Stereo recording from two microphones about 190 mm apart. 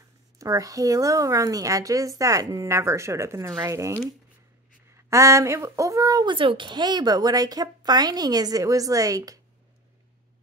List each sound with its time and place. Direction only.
0.4 s speech: 20° right (ahead or behind)